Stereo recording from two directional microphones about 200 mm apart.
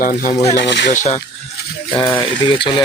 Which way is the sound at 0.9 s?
35° left (ahead or behind).